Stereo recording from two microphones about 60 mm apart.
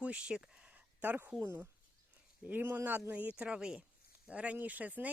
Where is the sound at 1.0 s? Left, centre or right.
Right.